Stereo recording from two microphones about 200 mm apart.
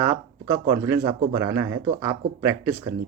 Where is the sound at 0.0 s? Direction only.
15° right (ahead or behind).